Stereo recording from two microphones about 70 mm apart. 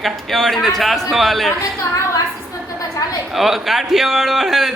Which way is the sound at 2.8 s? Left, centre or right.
Left.